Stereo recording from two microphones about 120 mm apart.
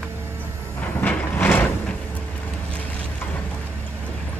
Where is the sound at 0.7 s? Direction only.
15° left (ahead or behind).